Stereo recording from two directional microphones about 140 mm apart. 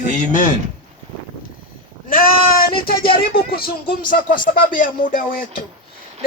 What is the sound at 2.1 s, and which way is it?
Speech, 90° left.